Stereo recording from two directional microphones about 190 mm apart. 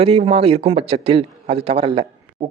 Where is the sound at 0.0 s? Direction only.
30° right (ahead or behind).